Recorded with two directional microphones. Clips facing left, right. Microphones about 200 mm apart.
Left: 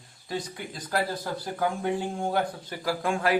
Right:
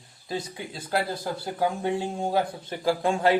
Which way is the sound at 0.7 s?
25° right (ahead or behind).